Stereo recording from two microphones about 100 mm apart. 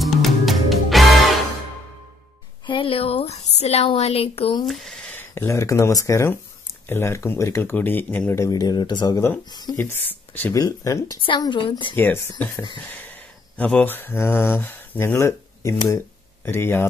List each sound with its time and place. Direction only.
0.0 s music: centre (ahead or behind)
2.6 s a woman's voice: 60° left (ahead or behind); by 4.6 s 75° left (ahead or behind)
4.6 s speech: centre (ahead or behind)
5.0 s speech: 20° left (ahead or behind)
8.4 s speech: 40° left (ahead or behind)
9.8 s speech: 20° left (ahead or behind)
10.5 s speech: 35° left (ahead or behind)
11.2 s a woman's voice: 50° left (ahead or behind)
11.9 s speech: 20° left (ahead or behind)
12.9 s a sound: 20° left (ahead or behind)
13.8 s speech: 20° left (ahead or behind)